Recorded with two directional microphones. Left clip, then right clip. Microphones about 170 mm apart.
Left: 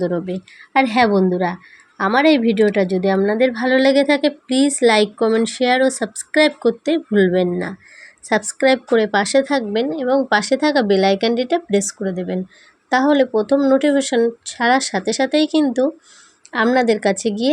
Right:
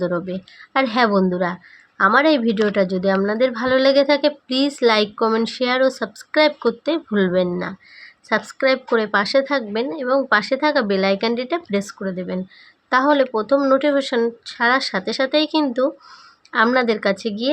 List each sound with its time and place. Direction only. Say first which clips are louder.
0.0 s a woman's voice: left 1 dB; 15° left (ahead or behind)